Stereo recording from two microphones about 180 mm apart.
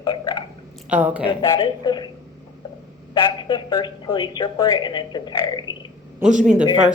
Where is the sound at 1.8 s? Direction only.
25° left (ahead or behind).